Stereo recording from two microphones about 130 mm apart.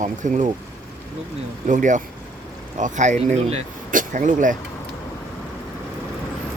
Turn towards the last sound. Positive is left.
turn(degrees=-80)